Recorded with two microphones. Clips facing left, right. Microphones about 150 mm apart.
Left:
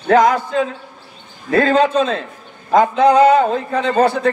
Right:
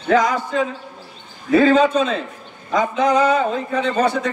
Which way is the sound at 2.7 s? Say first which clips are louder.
Left 6 dB; 55° left (ahead or behind).